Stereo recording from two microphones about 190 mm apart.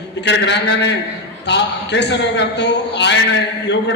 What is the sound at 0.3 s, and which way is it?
A man's voice, 65° left (ahead or behind).